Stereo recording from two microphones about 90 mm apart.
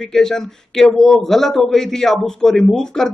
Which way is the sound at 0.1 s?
5° left (ahead or behind).